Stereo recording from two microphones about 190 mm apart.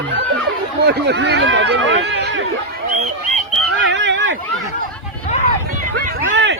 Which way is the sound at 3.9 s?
70° right (ahead or behind).